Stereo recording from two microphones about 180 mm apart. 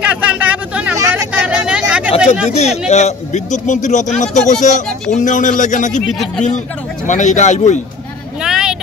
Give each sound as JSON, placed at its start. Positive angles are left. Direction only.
{"t": 0.0, "sound": "a sound", "side_deg": -5}
{"t": 2.9, "sound": "a man's voice", "side_deg": 40}
{"t": 7.1, "sound": "speech", "side_deg": 40}
{"t": 8.4, "sound": "vehicle", "side_deg": -5}